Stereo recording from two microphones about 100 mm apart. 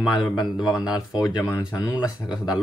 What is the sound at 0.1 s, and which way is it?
Speech, 45° left (ahead or behind).